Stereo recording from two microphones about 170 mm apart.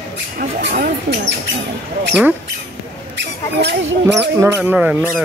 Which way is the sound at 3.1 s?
90° right.